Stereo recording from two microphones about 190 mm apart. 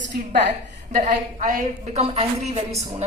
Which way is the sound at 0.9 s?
45° right (ahead or behind).